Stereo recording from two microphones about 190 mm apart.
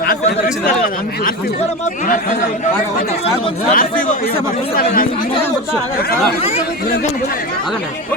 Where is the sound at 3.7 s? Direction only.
45° left (ahead or behind).